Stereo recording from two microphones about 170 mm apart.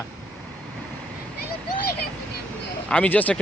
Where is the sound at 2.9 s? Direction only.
10° left (ahead or behind).